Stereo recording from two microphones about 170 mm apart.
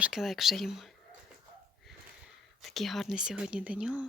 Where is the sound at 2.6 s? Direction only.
Centre (ahead or behind).